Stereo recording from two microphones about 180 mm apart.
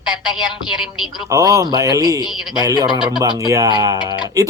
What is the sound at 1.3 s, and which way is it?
Speech, 20° right (ahead or behind).